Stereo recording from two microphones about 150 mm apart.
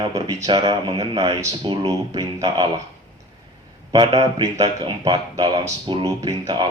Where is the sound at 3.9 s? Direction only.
30° right (ahead or behind).